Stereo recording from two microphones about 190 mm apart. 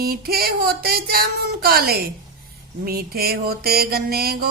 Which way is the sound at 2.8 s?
55° right (ahead or behind).